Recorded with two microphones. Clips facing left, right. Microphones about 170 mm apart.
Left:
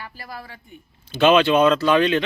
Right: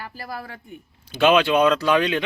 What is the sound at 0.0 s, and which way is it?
Speech, 45° right (ahead or behind).